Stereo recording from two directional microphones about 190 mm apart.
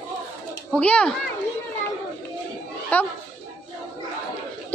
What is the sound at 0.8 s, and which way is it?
Speech, 5° left (ahead or behind).